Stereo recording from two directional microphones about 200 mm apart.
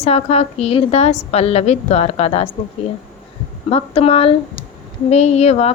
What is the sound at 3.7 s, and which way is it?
A woman's voice, 30° left (ahead or behind).